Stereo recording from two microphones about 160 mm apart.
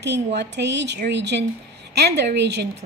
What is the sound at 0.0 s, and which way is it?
A woman's voice, 90° right.